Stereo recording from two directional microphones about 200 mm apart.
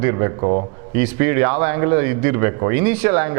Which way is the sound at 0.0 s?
20° right (ahead or behind).